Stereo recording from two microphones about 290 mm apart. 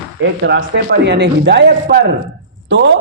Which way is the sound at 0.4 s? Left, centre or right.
Right.